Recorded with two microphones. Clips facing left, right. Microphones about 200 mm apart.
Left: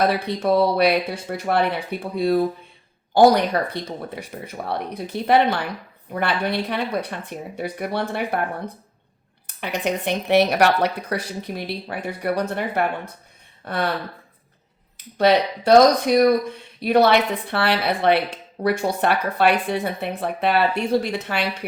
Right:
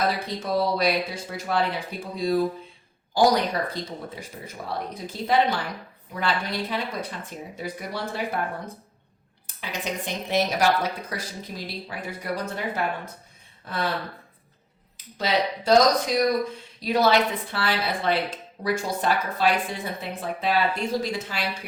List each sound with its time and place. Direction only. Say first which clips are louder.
0.0 s speech: left 6 dB; 60° left (ahead or behind)
14.9 s speech: left 8 dB; 60° left (ahead or behind)